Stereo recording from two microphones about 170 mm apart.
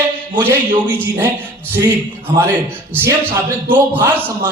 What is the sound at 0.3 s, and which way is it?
Speech, 10° right (ahead or behind).